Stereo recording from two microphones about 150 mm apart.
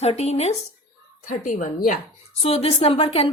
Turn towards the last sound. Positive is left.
turn(degrees=40)  # may be behind; listen again after turning